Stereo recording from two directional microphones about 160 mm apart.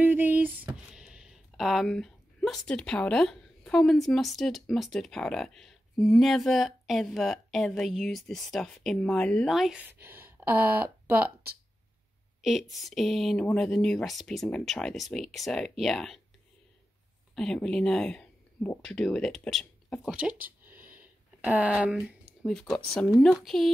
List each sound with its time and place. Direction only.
0.0 s a sound: 10° right (ahead or behind)
0.9 s speech: 5° right (ahead or behind)
12.4 s speech: centre (ahead or behind)
17.4 s speech: 5° left (ahead or behind)
20.0 s speech: 5° right (ahead or behind)
20.4 s a sound: 10° right (ahead or behind)
22.8 s speech: 5° left (ahead or behind)